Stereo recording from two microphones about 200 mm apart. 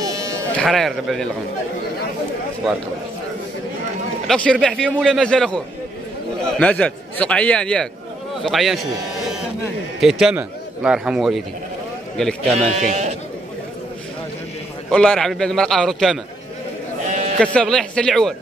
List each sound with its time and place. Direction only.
0.0 s sheep: 15° right (ahead or behind)
0.6 s a man's voice: centre (ahead or behind)
4.3 s a man's voice: 5° left (ahead or behind)
6.6 s a man's voice: 5° left (ahead or behind)
9.9 s a man's voice: centre (ahead or behind)
12.5 s speech: 35° right (ahead or behind)
14.9 s a man's voice: 5° left (ahead or behind)
17.4 s a man's voice: 5° left (ahead or behind)